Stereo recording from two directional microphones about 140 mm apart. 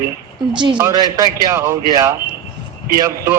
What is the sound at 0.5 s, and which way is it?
Speech, 35° right (ahead or behind).